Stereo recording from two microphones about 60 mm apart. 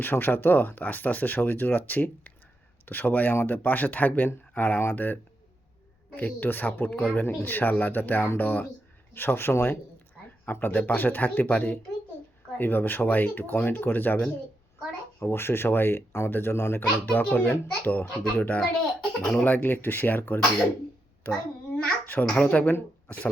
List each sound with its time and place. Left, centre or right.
0.0 s speech: left
9.1 s speech: left
10.4 s speech: left
15.2 s speech: left
16.8 s speech: left
18.0 s a child's voice: centre